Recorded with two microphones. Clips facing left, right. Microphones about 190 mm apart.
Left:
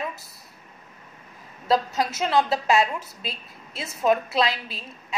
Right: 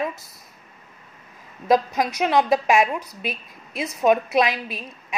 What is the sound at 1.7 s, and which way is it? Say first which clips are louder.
A woman's voice: right 3 dB; 15° right (ahead or behind).